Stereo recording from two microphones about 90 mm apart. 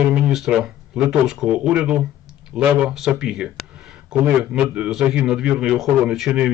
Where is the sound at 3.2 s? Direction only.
5° right (ahead or behind).